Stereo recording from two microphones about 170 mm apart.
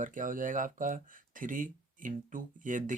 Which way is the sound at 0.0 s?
50° right (ahead or behind).